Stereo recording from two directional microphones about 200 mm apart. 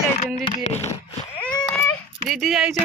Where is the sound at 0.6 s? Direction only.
35° left (ahead or behind).